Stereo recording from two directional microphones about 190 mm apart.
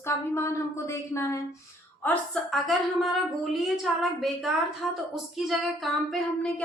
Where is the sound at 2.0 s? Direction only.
5° left (ahead or behind).